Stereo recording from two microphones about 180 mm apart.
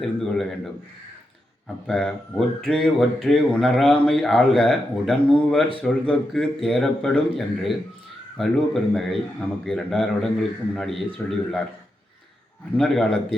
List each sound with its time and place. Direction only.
0.0 s speech: centre (ahead or behind)
12.7 s speech: centre (ahead or behind)